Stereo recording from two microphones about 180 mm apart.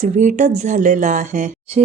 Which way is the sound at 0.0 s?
45° right (ahead or behind).